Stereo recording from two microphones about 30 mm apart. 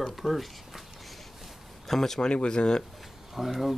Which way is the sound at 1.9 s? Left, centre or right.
Centre.